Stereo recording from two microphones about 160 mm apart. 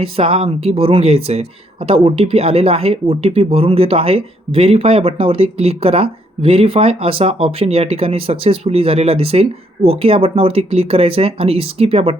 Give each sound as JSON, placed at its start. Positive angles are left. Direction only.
{"t": 0.0, "sound": "speech", "side_deg": -35}